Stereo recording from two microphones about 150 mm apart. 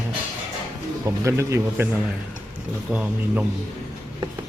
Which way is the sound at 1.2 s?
20° right (ahead or behind).